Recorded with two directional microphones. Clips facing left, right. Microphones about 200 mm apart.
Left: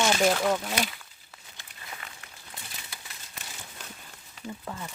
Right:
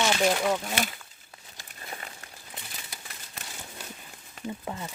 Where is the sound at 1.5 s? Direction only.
35° right (ahead or behind).